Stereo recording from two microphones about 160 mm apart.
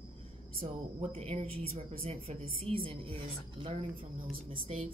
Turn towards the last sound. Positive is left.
turn(degrees=-35)  # may be behind; listen again after turning